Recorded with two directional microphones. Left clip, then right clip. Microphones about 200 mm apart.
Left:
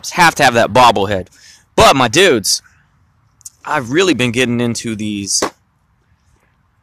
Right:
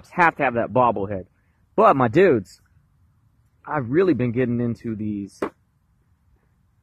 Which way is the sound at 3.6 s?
10° left (ahead or behind).